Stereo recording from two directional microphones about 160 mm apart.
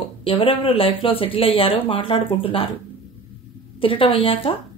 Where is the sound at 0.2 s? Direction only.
35° left (ahead or behind).